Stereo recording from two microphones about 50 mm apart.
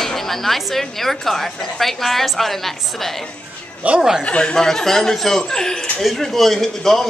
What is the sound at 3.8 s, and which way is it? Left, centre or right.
Speech, right.